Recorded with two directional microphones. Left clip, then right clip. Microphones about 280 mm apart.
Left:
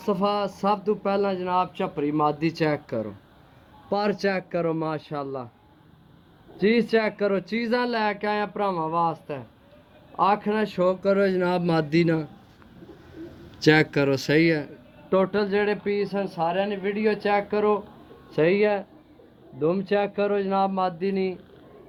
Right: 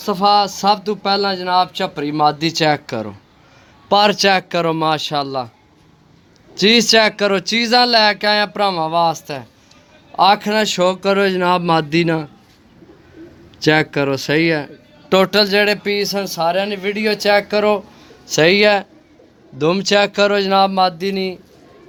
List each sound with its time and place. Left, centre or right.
0.0 s speech: centre
0.6 s speech: right
3.9 s speech: centre
4.5 s speech: right
6.6 s speech: right
10.2 s speech: right
10.9 s speech: centre
13.2 s bird: centre
13.6 s speech: centre
15.1 s speech: right